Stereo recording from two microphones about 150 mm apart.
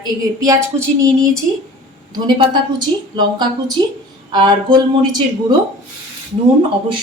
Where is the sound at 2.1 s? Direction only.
30° right (ahead or behind).